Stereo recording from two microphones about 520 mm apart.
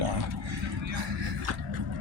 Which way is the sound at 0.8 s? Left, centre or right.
Right.